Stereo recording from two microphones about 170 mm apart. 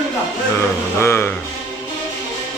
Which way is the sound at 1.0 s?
15° left (ahead or behind).